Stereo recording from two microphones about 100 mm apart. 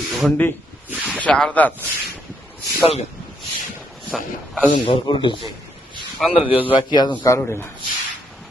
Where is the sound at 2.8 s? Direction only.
90° left.